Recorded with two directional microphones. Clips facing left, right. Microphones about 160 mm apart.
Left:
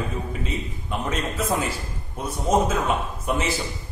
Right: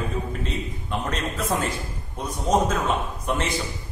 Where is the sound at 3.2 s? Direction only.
5° left (ahead or behind).